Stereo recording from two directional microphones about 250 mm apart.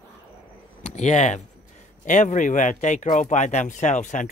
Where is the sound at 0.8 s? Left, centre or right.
Left.